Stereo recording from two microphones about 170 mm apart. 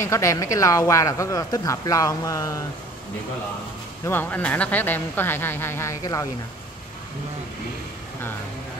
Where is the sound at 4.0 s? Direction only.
10° left (ahead or behind).